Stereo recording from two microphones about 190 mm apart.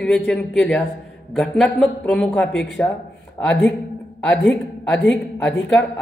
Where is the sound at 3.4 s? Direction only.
15° left (ahead or behind).